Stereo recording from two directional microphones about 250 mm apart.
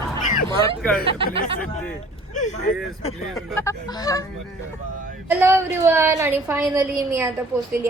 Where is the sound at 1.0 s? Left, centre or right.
Right.